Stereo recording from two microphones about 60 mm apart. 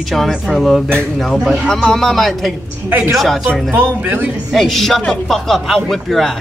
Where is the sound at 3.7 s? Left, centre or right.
Right.